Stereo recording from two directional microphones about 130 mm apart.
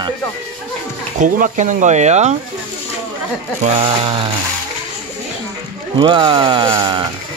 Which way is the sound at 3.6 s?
45° right (ahead or behind).